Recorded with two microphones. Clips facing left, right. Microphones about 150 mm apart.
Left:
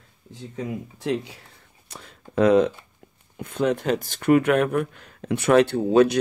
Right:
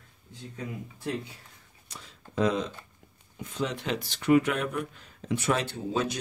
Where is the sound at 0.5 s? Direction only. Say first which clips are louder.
Left 8 dB; 90° left.